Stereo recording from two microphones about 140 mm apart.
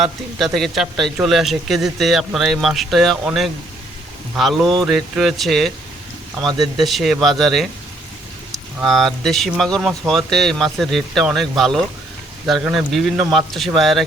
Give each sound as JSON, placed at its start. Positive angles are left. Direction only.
{"t": 0.0, "sound": "speech", "side_deg": 0}
{"t": 6.4, "sound": "speech", "side_deg": -30}
{"t": 6.7, "sound": "speech", "side_deg": 0}